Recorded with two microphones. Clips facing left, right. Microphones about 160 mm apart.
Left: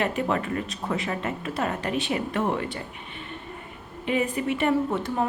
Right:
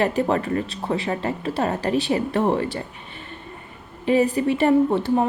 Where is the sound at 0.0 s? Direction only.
35° right (ahead or behind).